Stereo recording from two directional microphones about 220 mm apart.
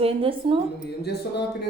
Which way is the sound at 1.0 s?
50° left (ahead or behind).